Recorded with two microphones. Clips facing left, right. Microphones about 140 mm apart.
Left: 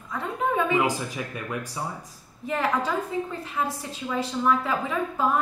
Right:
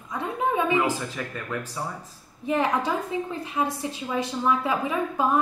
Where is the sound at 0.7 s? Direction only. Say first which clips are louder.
Even; 15° left (ahead or behind).